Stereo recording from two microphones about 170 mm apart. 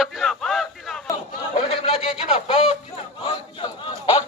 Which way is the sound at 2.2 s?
35° left (ahead or behind).